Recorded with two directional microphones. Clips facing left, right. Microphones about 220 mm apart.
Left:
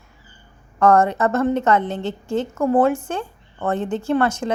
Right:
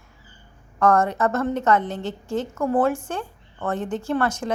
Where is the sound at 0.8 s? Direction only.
25° left (ahead or behind).